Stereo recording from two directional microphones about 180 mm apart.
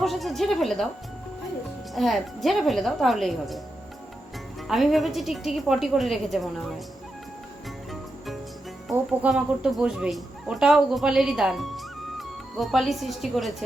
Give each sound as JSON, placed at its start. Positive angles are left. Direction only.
{"t": 0.0, "sound": "speech", "side_deg": 0}
{"t": 2.0, "sound": "speech", "side_deg": 0}
{"t": 4.7, "sound": "speech", "side_deg": 0}
{"t": 8.9, "sound": "speech", "side_deg": 0}